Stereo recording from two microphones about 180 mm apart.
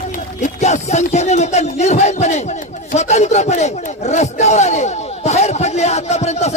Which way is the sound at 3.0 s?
40° left (ahead or behind).